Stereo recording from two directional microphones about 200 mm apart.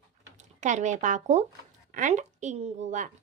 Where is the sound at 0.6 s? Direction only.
35° right (ahead or behind).